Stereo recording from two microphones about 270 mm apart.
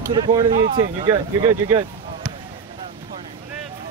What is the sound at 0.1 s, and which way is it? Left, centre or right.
Speech, centre.